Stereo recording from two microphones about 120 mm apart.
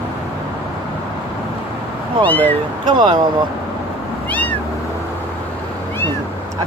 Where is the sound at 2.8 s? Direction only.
40° right (ahead or behind).